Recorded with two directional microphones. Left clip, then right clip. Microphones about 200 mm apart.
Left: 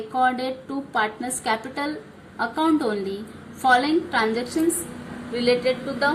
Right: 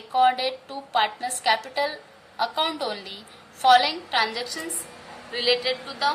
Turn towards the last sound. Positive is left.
turn(degrees=-20)  # may be behind; listen again after turning